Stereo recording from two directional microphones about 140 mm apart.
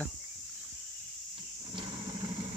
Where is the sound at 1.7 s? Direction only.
35° right (ahead or behind).